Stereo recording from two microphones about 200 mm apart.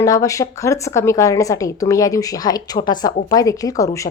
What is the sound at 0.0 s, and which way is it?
A woman's voice, 15° left (ahead or behind).